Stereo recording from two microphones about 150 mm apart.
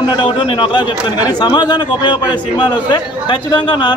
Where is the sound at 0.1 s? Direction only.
30° left (ahead or behind).